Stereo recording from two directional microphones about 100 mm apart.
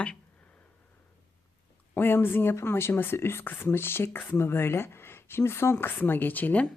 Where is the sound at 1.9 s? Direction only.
20° left (ahead or behind).